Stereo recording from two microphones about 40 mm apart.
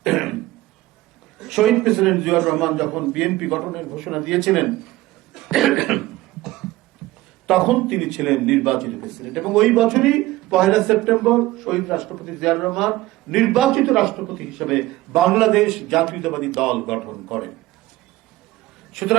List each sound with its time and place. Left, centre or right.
0.0 s throat clearing: centre
1.4 s a man's voice: centre
7.0 s a sound: centre
7.4 s a man's voice: centre